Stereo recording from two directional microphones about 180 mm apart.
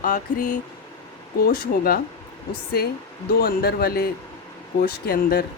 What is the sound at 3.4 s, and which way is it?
Speech, 55° left (ahead or behind).